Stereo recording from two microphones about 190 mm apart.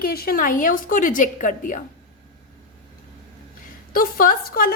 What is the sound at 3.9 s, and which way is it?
Speech, 50° left (ahead or behind).